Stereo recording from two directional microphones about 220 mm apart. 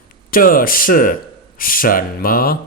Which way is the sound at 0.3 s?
40° left (ahead or behind).